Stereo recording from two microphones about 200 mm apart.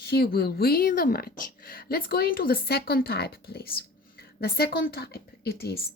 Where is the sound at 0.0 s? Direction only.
50° left (ahead or behind).